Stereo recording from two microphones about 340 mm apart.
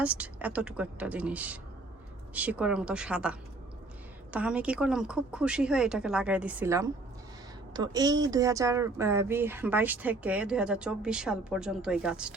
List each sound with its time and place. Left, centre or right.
0.0 s speech: centre